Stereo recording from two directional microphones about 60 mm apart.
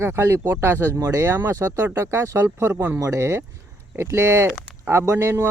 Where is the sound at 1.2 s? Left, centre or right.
Right.